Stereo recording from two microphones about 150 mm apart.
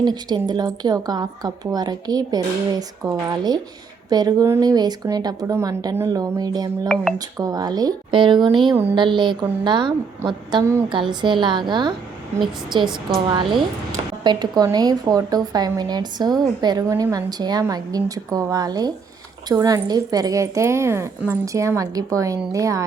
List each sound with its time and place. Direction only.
0.0 s a woman's voice: 30° right (ahead or behind)
6.8 s a woman's voice: 5° left (ahead or behind)
7.2 s a woman's voice: 25° right (ahead or behind)
8.7 s speech: 15° right (ahead or behind)
9.0 s a woman's voice: 30° right (ahead or behind)
12.8 s a woman's voice: 5° right (ahead or behind)
13.2 s a woman's voice: 30° right (ahead or behind)